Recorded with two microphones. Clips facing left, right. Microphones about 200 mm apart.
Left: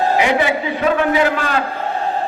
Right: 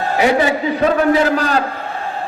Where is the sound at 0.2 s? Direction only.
40° right (ahead or behind).